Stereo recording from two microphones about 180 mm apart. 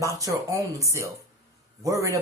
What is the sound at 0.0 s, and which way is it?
Speech, 15° right (ahead or behind).